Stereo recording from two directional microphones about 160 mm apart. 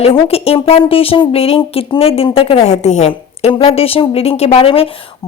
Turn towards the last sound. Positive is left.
turn(degrees=35)  # may be behind; listen again after turning